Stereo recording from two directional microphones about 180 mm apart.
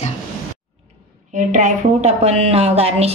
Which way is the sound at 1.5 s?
40° right (ahead or behind).